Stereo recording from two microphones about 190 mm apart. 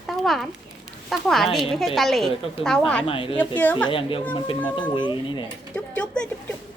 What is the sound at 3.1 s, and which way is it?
Speech, 30° left (ahead or behind).